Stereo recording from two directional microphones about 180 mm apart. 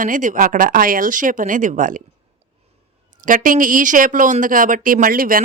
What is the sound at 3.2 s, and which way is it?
A woman's voice, 50° right (ahead or behind).